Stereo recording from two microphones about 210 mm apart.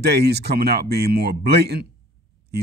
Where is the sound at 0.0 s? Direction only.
50° right (ahead or behind).